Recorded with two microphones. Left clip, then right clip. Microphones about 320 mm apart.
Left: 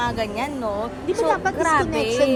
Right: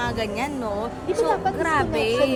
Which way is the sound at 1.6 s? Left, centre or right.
Centre.